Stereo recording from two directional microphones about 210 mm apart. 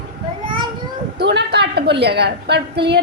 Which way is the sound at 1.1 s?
55° right (ahead or behind).